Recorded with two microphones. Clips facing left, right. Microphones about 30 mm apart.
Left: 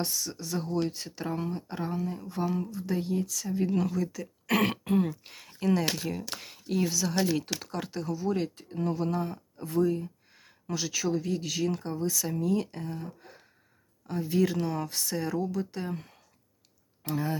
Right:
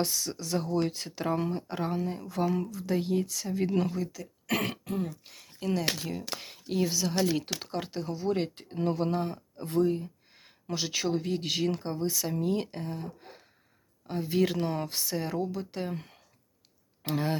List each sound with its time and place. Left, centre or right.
0.0 s speech: right
3.2 s speech: right
4.2 s speech: centre
4.8 s speech: centre
6.0 s a woman's voice: centre
7.4 s speech: right
7.8 s speech: right
8.3 s speech: right
9.1 s speech: right
11.0 s speech: right
14.1 s speech: right
15.0 s speech: right
17.0 s speech: right